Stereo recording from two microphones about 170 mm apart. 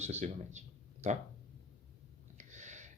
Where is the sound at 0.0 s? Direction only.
40° right (ahead or behind).